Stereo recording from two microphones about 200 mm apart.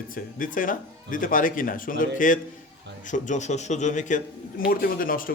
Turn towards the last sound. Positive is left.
turn(degrees=45)  # may be behind; listen again after turning